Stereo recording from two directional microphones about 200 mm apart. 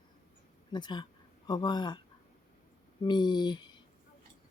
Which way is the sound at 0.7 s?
20° left (ahead or behind).